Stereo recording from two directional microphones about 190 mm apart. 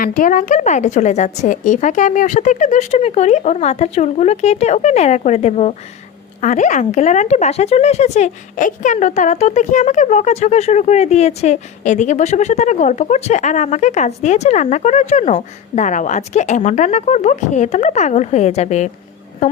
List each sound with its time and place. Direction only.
0.2 s speech: 45° left (ahead or behind)